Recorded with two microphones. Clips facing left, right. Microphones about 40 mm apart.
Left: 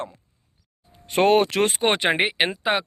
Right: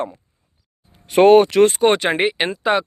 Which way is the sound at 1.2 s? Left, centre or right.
Centre.